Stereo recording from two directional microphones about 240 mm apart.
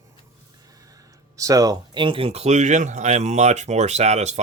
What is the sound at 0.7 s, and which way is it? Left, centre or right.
Speech, centre.